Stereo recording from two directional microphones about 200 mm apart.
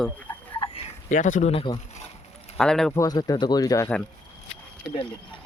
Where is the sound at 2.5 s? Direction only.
5° left (ahead or behind).